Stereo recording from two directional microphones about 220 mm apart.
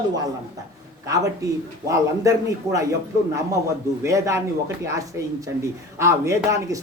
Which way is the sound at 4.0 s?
15° right (ahead or behind).